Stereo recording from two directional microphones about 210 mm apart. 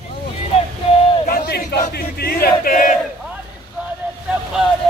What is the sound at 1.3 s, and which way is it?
Crowd, 50° left (ahead or behind).